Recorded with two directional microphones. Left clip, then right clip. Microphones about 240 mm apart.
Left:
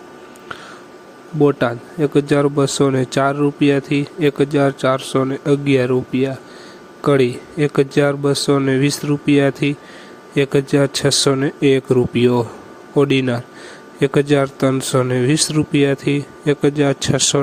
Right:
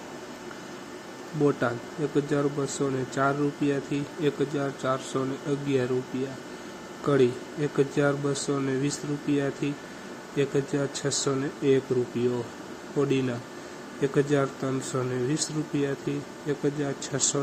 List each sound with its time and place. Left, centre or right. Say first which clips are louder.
1.5 s speech: left 8 dB; left